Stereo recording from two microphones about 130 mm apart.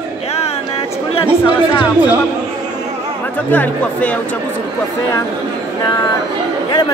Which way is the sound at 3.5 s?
10° left (ahead or behind).